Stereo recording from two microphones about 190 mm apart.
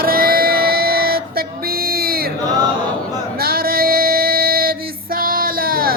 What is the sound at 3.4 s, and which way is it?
Female singing, 50° right (ahead or behind).